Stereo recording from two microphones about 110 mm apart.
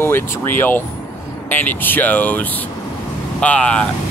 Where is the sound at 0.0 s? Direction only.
20° left (ahead or behind).